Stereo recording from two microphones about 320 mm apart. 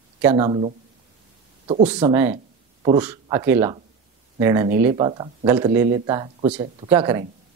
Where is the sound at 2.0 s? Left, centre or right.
Centre.